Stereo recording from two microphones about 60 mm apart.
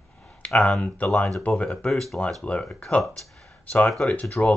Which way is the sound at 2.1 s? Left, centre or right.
Centre.